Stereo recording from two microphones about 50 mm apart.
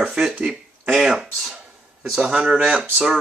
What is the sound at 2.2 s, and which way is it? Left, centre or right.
Speech, right.